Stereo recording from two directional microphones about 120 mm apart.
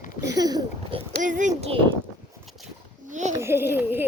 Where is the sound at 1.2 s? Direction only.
90° right.